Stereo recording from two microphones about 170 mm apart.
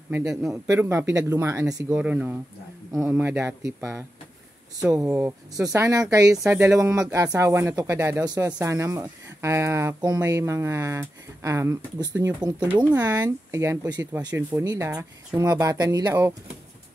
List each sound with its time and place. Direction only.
0.1 s a man's voice: 5° right (ahead or behind)
0.4 s speech: 15° right (ahead or behind)